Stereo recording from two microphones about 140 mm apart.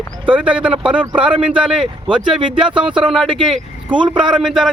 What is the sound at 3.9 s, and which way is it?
Speech, 35° right (ahead or behind).